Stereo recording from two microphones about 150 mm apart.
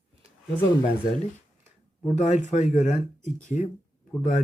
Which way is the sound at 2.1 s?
50° left (ahead or behind).